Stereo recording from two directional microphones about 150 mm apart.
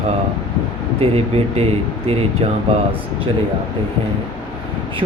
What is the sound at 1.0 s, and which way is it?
Speech, 40° right (ahead or behind).